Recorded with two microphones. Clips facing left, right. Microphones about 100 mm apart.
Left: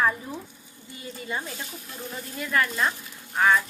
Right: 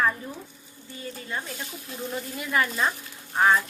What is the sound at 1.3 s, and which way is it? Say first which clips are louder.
Speech: left 2 dB; 5° left (ahead or behind).